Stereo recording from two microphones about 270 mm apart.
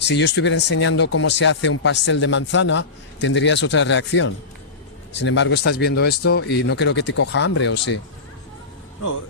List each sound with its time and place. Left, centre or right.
0.0 s speech: left